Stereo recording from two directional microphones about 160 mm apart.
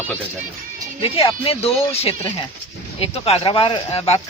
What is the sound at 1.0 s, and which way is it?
Speech, 35° left (ahead or behind).